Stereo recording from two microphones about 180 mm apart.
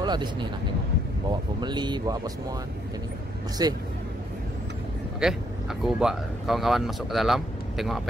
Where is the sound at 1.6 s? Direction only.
25° right (ahead or behind).